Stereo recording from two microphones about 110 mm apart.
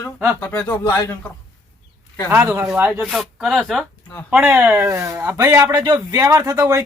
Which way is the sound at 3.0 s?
Centre (ahead or behind).